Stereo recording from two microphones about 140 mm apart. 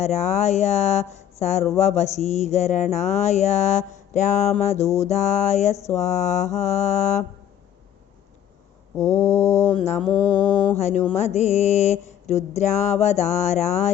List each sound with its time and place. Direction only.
0.0 s speech: 55° left (ahead or behind)
4.9 s mantra: 55° left (ahead or behind)
5.7 s speech: 20° left (ahead or behind)
6.0 s mantra: 55° left (ahead or behind)
9.0 s mantra: 20° left (ahead or behind)
9.7 s speech: 50° left (ahead or behind)
10.1 s mantra: 35° left (ahead or behind)
10.8 s speech: 55° left (ahead or behind)